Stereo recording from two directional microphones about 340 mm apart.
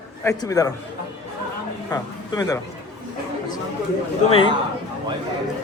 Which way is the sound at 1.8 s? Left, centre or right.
Centre.